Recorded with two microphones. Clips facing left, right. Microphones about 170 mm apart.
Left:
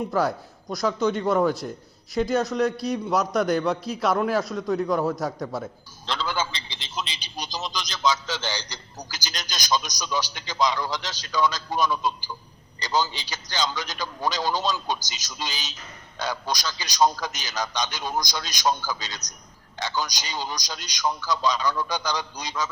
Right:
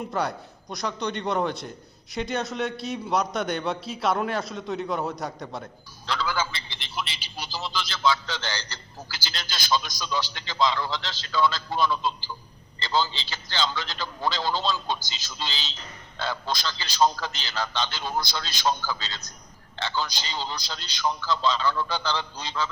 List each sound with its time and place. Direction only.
0.1 s a man's voice: centre (ahead or behind)
6.1 s a man's voice: 20° left (ahead or behind)